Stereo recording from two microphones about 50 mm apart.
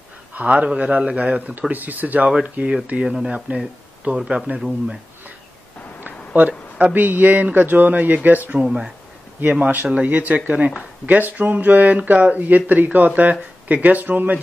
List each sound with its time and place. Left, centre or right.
0.3 s speech: right
6.0 s a sound: right
7.5 s speech: right
8.5 s speech: centre
9.4 s speech: right